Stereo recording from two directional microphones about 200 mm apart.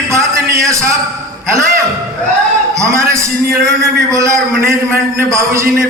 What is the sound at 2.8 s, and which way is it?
A man's voice, 15° right (ahead or behind).